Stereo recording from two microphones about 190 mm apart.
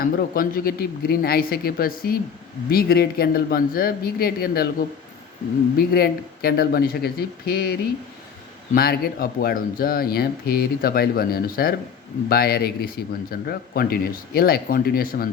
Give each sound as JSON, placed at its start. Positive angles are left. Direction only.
{"t": 0.0, "sound": "speech", "side_deg": 50}
{"t": 5.7, "sound": "speech", "side_deg": 55}